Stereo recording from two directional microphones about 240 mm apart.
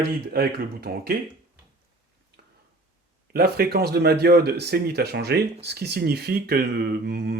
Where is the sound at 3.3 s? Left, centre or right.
Right.